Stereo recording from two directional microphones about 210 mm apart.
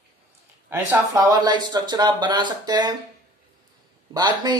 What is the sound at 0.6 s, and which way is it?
Speech, 15° right (ahead or behind).